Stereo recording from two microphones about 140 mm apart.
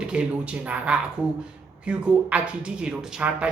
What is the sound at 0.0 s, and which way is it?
Speech, 5° right (ahead or behind).